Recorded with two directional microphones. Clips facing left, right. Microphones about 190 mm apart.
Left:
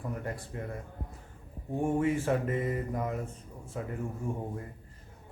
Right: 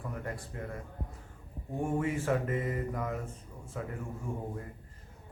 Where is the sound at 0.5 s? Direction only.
25° left (ahead or behind).